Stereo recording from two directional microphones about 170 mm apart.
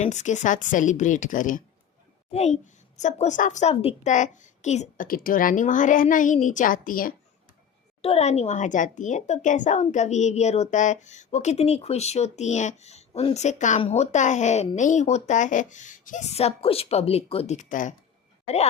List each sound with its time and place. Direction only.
0.0 s a woman's voice: 45° left (ahead or behind)
2.3 s a woman's voice: 40° left (ahead or behind)
5.0 s a woman's voice: 55° left (ahead or behind)
8.0 s a woman's voice: 40° left (ahead or behind)
18.4 s speech: 40° left (ahead or behind)